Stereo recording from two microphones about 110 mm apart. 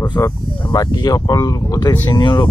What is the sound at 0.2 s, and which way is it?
Speech, 20° left (ahead or behind).